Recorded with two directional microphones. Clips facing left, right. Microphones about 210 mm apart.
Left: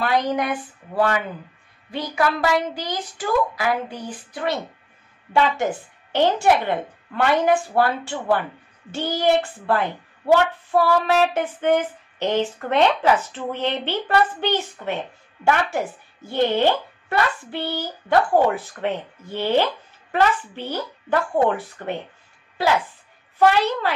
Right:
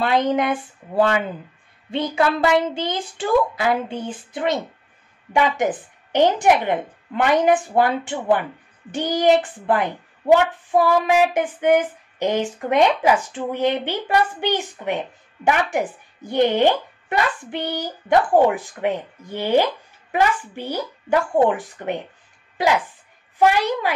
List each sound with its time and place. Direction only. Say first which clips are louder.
0.0 s a child's voice: right 3 dB; 25° right (ahead or behind)
23.4 s a child's voice: even; 15° right (ahead or behind)